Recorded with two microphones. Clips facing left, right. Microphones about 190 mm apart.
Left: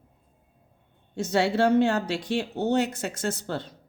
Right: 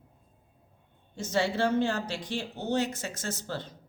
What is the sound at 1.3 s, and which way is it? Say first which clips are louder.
A woman's voice: left 5 dB; 65° left (ahead or behind).